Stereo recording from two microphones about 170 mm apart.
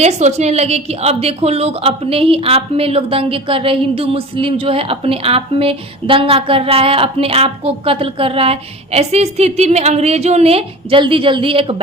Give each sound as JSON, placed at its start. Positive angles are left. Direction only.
{"t": 0.0, "sound": "a woman's voice", "side_deg": -40}